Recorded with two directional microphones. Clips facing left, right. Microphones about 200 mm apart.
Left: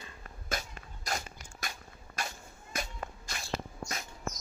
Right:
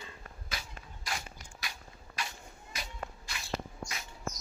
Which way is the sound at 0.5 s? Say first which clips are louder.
Left 7 dB; 45° left (ahead or behind).